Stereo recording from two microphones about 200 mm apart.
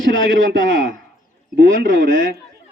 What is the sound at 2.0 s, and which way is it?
Speech, 40° right (ahead or behind).